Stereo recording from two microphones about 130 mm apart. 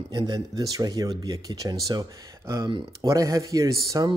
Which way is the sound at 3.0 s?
25° right (ahead or behind).